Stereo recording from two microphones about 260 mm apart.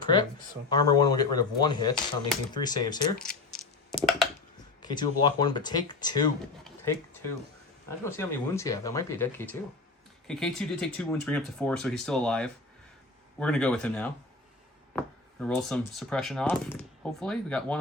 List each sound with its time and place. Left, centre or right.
0.0 s speech: centre
3.2 s a sound: centre
4.8 s speech: centre